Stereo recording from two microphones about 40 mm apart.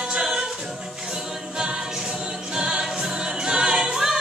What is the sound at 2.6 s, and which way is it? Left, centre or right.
Choir, right.